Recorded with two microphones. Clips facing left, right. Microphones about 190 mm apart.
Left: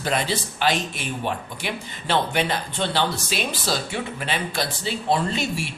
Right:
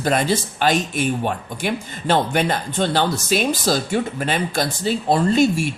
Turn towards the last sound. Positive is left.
turn(degrees=-45)  # may be behind; listen again after turning